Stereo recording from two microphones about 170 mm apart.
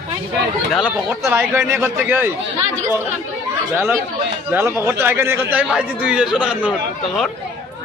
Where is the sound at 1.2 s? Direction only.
15° right (ahead or behind).